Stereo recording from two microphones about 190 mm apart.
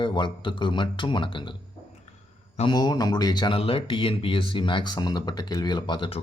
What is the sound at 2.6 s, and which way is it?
Speech, 20° left (ahead or behind).